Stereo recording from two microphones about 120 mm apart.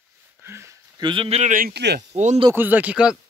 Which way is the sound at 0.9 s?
40° right (ahead or behind).